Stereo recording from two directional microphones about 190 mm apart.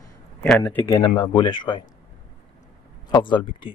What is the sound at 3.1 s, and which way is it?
Speech, 25° left (ahead or behind).